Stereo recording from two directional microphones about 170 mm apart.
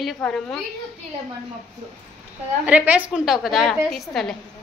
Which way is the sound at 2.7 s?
10° right (ahead or behind).